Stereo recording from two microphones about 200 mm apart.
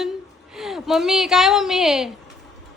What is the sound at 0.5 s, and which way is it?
A woman's voice, centre (ahead or behind).